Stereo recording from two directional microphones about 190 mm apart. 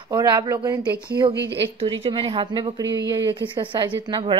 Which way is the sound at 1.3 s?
65° right (ahead or behind).